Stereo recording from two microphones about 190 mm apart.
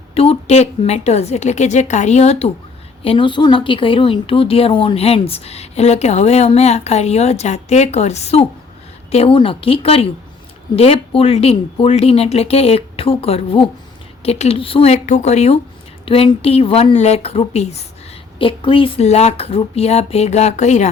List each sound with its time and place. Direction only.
0.1 s speech: 30° left (ahead or behind)